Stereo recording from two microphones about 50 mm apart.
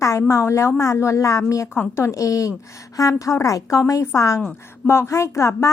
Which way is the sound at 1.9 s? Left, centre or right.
Left.